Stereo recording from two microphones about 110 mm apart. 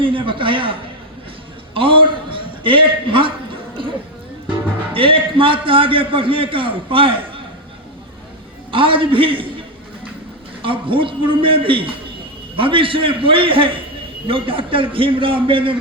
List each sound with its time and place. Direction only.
0.0 s a man's voice: 50° right (ahead or behind)
1.7 s a sound: 55° right (ahead or behind)
4.9 s a man's voice: 55° right (ahead or behind)
8.7 s a man's voice: 50° right (ahead or behind)